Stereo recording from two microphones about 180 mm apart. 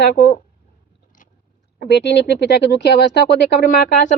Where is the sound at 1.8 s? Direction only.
70° left (ahead or behind).